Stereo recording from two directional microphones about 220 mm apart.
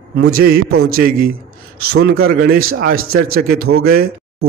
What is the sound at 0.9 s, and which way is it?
A man's voice, 40° right (ahead or behind).